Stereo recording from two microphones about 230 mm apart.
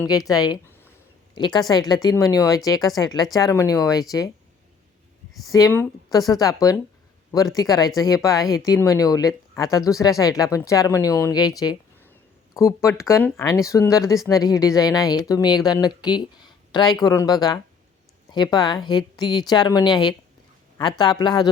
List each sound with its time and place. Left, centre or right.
0.0 s speech: centre
5.5 s a woman's voice: centre